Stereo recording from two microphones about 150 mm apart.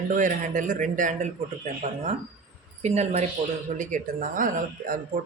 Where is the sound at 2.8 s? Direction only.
50° right (ahead or behind).